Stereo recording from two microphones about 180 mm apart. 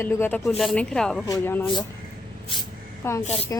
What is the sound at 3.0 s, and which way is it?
Speech, 15° left (ahead or behind).